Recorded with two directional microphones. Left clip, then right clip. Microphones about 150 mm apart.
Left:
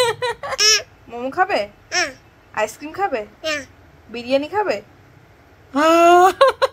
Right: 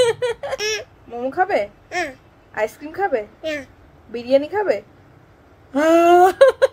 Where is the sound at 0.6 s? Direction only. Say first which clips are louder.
Left 11 dB; 15° right (ahead or behind).